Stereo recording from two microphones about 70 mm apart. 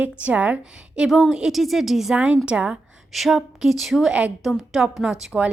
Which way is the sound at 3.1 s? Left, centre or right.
Centre.